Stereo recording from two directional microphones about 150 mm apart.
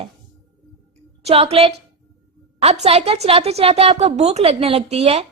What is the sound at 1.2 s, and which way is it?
A woman's voice, 40° right (ahead or behind).